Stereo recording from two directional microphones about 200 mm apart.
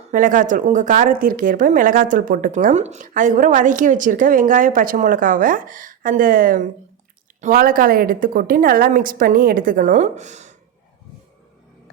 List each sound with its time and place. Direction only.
0.1 s a woman's voice: 40° right (ahead or behind)